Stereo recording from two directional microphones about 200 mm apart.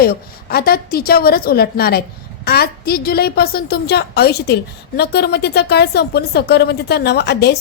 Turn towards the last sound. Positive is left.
turn(degrees=55)  # may be behind; listen again after turning